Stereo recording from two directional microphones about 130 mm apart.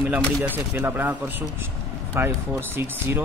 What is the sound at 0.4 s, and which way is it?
Speech, 15° right (ahead or behind).